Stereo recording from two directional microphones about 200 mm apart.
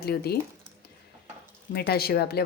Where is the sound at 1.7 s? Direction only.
50° left (ahead or behind).